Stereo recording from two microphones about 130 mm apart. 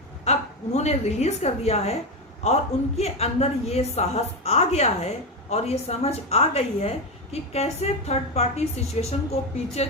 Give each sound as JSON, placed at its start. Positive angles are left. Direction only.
{"t": 0.3, "sound": "a woman's voice", "side_deg": 60}